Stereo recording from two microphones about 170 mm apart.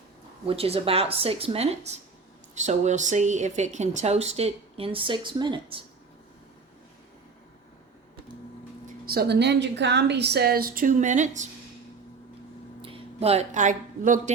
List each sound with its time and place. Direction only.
0.4 s speech: 35° right (ahead or behind)
9.0 s speech: 70° right (ahead or behind); by 11.4 s 45° right (ahead or behind)
12.8 s speech: 35° right (ahead or behind)